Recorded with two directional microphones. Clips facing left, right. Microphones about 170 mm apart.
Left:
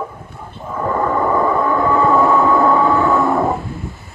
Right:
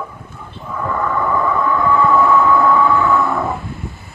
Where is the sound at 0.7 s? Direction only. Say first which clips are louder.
Left 2 dB; 35° left (ahead or behind).